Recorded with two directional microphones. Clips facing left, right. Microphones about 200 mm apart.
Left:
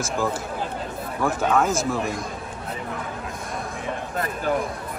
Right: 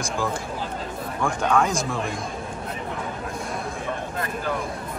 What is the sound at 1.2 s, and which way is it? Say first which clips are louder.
Speech: left 1 dB; 5° left (ahead or behind).